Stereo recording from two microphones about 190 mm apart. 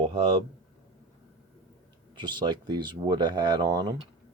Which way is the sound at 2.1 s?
25° right (ahead or behind).